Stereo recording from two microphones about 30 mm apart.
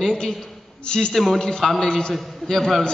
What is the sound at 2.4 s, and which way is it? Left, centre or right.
Speech, centre.